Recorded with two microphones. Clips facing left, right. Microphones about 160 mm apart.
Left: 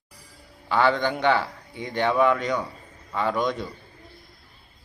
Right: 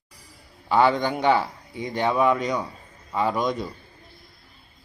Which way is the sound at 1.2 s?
15° right (ahead or behind).